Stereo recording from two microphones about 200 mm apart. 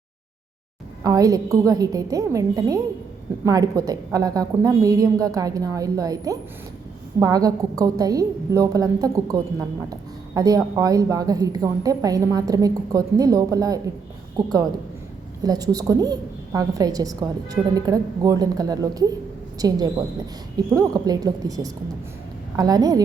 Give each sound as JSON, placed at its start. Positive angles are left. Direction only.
{"t": 1.0, "sound": "a woman's voice", "side_deg": -15}